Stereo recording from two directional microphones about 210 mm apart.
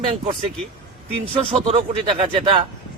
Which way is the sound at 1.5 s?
30° right (ahead or behind).